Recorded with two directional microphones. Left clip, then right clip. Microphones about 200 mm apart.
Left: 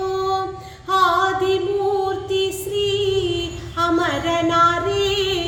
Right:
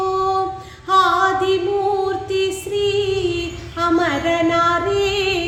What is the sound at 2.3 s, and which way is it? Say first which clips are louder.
Female singing: right 1 dB; 15° right (ahead or behind).